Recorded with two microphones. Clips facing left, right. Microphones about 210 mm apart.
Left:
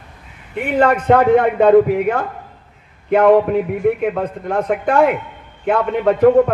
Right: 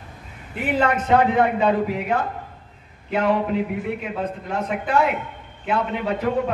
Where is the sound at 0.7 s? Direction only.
55° left (ahead or behind).